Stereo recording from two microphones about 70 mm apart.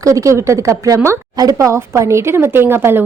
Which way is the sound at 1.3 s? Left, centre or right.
Right.